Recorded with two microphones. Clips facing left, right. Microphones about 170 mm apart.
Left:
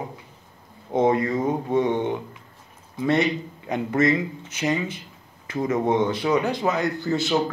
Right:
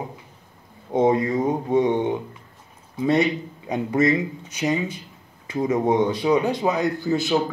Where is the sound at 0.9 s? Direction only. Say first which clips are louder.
Right 1 dB; 15° right (ahead or behind).